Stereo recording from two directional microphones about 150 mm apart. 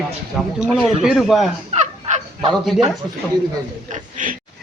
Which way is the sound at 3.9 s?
60° right (ahead or behind).